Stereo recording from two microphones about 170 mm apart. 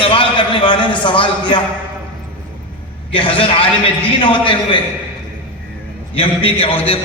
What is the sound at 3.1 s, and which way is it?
A man's voice, 30° left (ahead or behind).